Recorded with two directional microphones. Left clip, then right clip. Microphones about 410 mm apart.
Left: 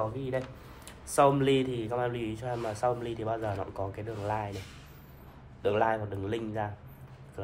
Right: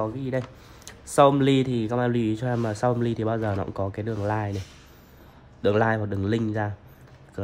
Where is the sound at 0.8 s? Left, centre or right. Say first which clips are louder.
Right 6 dB; right.